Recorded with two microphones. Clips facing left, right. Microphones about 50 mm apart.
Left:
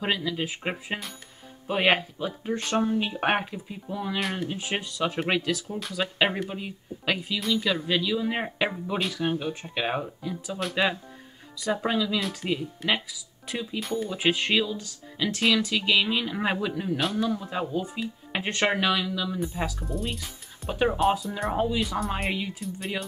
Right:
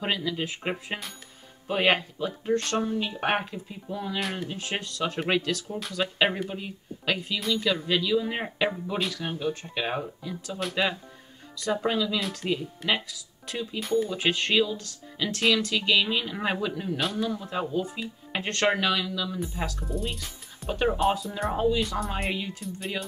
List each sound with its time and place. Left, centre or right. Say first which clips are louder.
0.0 s speech: left 1 dB; centre
4.5 s speech: left 2 dB; centre